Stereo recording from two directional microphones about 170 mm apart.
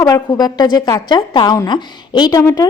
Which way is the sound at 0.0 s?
20° left (ahead or behind).